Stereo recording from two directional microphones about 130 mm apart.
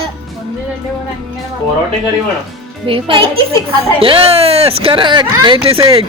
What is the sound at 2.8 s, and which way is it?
Speech, 45° right (ahead or behind).